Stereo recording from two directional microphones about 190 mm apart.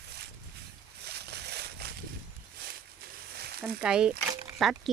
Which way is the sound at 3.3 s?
55° right (ahead or behind).